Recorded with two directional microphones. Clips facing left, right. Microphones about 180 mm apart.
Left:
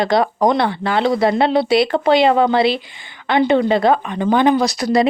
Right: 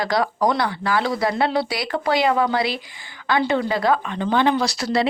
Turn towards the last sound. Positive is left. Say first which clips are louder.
# left 5 dB
turn(degrees=15)  # may be behind; listen again after turning